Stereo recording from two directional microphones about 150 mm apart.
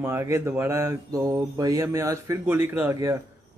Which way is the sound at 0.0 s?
15° right (ahead or behind).